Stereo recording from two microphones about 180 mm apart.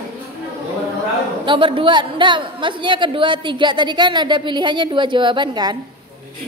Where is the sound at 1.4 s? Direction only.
25° right (ahead or behind).